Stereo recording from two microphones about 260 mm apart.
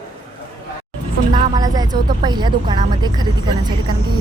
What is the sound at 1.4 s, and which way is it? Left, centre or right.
Speech, centre.